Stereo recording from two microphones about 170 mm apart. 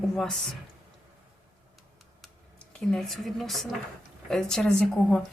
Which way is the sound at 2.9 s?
Centre (ahead or behind).